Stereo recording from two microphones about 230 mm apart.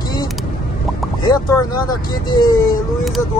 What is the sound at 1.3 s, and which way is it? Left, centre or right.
Speech, centre.